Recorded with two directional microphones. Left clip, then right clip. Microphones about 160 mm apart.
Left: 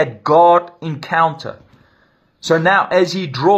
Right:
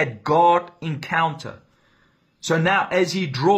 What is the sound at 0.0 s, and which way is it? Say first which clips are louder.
A man's voice: left 6 dB; 10° right (ahead or behind).